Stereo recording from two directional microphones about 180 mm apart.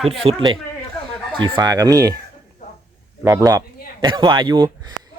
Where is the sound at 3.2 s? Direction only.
15° right (ahead or behind).